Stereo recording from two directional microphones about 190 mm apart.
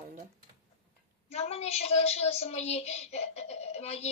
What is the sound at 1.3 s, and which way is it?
A woman's voice, 35° left (ahead or behind).